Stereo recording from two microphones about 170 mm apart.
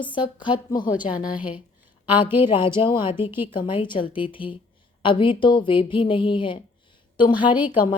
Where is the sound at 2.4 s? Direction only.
30° left (ahead or behind).